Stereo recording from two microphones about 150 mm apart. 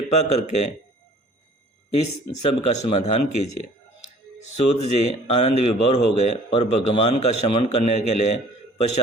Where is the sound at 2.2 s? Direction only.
40° left (ahead or behind).